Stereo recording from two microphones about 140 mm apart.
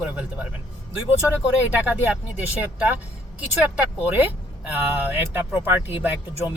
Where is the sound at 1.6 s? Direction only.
10° right (ahead or behind).